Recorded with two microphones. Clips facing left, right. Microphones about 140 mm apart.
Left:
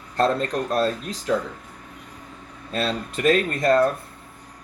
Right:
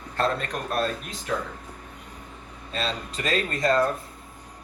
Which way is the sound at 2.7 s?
55° left (ahead or behind).